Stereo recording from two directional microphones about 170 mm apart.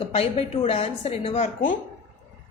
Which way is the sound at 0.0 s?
35° left (ahead or behind).